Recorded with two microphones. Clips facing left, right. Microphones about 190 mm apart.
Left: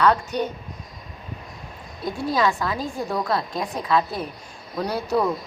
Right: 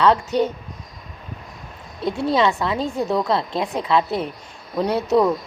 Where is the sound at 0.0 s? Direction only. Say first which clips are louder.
Right 3 dB; 25° right (ahead or behind).